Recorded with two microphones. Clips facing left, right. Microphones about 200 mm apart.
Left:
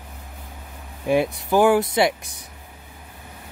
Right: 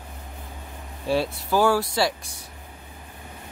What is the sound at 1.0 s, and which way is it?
Speech, 15° left (ahead or behind).